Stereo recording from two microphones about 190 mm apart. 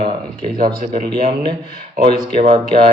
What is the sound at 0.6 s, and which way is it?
Speech, 45° right (ahead or behind).